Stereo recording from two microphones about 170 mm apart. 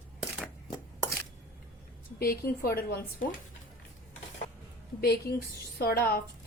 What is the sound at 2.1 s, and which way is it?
Speech, 60° left (ahead or behind).